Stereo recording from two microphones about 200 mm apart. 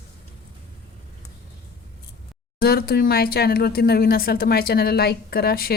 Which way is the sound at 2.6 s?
50° left (ahead or behind).